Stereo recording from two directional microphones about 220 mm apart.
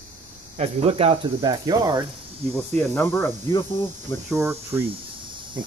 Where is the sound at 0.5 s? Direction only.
25° right (ahead or behind).